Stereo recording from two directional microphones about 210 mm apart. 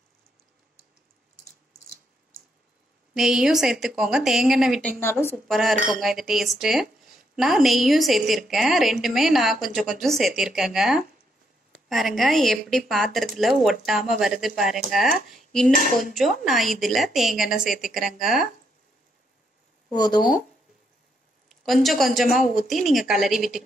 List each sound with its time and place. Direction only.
3.2 s speech: centre (ahead or behind)
15.7 s speech: 40° left (ahead or behind)
16.2 s speech: centre (ahead or behind)
20.2 s speech: 40° left (ahead or behind)
21.5 s a woman's voice: centre (ahead or behind)
22.4 s speech: 40° left (ahead or behind)
23.0 s speech: centre (ahead or behind)